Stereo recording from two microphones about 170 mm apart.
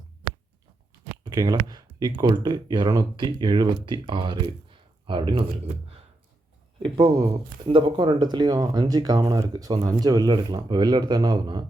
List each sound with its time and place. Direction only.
1.2 s speech: 25° right (ahead or behind)
6.8 s speech: 30° right (ahead or behind)